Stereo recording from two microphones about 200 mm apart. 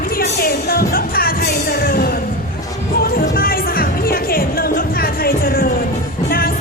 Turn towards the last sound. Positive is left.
turn(degrees=50)  # may be behind; listen again after turning